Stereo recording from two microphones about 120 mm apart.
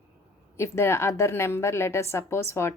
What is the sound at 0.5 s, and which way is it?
A woman's voice, 20° left (ahead or behind).